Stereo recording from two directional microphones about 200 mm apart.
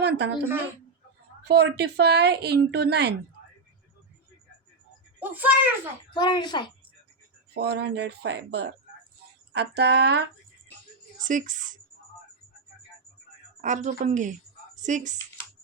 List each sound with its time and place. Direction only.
0.0 s a woman's voice: 55° right (ahead or behind)
1.5 s speech: 55° right (ahead or behind)
5.2 s speech: 10° right (ahead or behind)
6.1 s speech: 20° left (ahead or behind)
7.5 s speech: 55° right (ahead or behind)
11.2 s a woman's voice: 40° right (ahead or behind)
13.6 s a woman's voice: 40° right (ahead or behind)